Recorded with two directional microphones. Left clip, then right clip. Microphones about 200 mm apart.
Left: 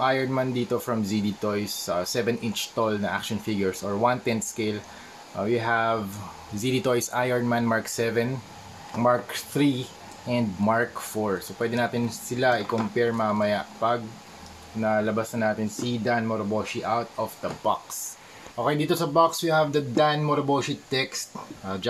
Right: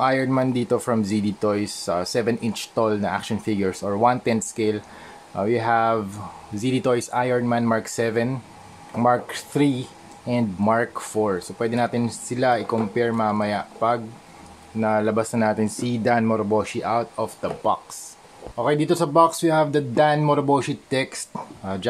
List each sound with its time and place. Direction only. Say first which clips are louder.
0.0 s speech: right 4 dB; 35° right (ahead or behind)